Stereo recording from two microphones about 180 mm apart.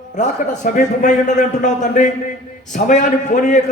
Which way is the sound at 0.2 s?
45° left (ahead or behind).